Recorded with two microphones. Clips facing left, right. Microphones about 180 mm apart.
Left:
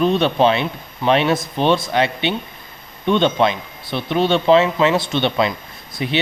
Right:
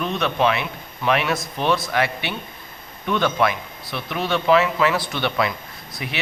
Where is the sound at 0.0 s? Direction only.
30° left (ahead or behind).